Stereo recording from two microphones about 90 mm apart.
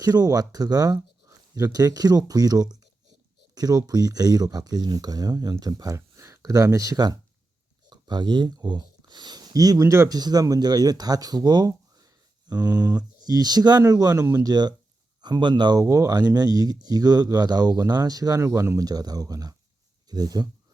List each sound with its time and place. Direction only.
0.0 s speech: 45° right (ahead or behind)
18.8 s speech: 45° right (ahead or behind)